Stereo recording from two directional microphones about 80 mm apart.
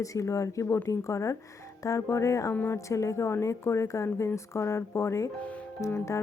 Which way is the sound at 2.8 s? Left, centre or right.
Left.